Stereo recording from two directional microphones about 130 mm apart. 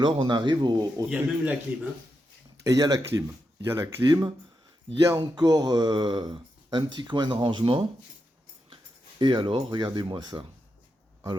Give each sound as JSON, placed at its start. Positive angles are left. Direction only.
{"t": 0.0, "sound": "speech", "side_deg": -35}
{"t": 1.1, "sound": "speech", "side_deg": -10}
{"t": 2.6, "sound": "speech", "side_deg": -30}